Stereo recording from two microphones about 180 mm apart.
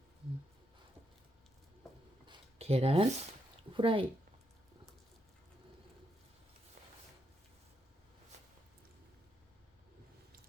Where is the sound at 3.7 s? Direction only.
30° right (ahead or behind).